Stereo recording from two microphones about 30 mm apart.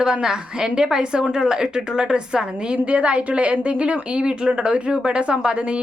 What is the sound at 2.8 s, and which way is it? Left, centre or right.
A woman's voice, right.